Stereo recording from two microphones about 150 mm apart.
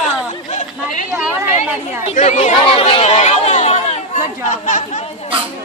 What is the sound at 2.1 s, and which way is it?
Speech, 50° left (ahead or behind).